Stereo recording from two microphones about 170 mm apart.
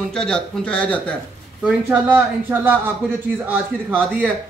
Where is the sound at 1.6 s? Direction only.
10° right (ahead or behind).